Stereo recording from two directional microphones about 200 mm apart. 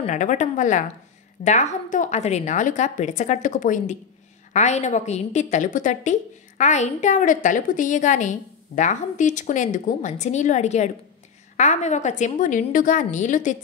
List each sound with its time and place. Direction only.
0.0 s a woman's voice: 40° left (ahead or behind)